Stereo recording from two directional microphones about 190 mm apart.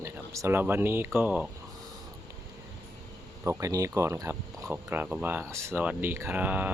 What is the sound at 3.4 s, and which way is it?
Speech, 15° right (ahead or behind).